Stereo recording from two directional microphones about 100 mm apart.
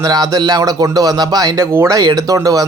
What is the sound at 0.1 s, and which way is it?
Speech, 45° right (ahead or behind).